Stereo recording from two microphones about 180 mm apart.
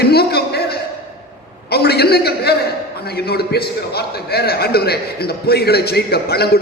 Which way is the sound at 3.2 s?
60° left (ahead or behind).